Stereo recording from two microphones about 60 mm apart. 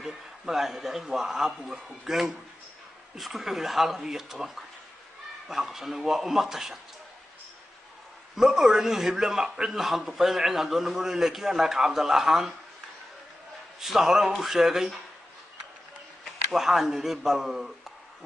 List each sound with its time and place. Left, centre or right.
0.0 s a man's voice: centre
8.4 s a man's voice: centre
13.7 s a man's voice: centre
16.5 s a man's voice: centre